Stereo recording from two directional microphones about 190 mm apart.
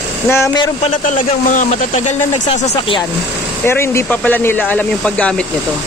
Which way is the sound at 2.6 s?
25° left (ahead or behind).